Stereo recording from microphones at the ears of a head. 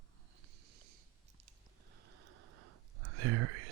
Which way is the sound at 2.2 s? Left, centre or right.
Right.